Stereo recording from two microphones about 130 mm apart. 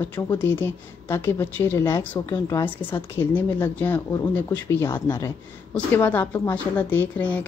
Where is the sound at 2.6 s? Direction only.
15° left (ahead or behind).